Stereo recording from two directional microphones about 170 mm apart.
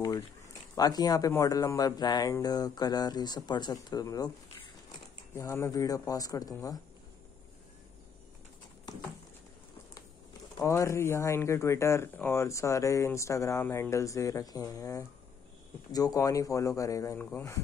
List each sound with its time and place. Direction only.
0.7 s speech: 20° left (ahead or behind)
5.3 s speech: 15° left (ahead or behind)
10.6 s speech: 15° left (ahead or behind)